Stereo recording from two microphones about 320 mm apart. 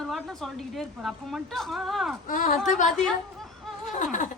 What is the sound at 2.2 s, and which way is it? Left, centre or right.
Speech, left.